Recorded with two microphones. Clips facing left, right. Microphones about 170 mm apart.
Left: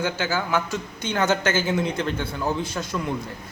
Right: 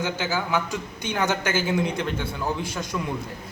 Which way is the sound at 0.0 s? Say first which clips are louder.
Left 1 dB; 15° right (ahead or behind).